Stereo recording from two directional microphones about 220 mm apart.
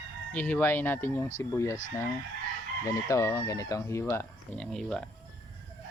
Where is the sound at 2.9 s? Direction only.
15° left (ahead or behind).